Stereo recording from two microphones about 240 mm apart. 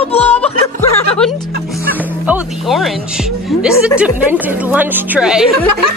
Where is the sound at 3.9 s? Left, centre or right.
Centre.